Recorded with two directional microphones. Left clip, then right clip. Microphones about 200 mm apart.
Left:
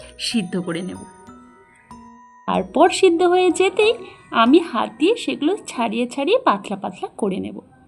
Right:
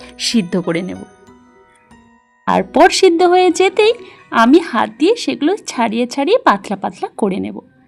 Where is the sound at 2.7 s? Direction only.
45° right (ahead or behind).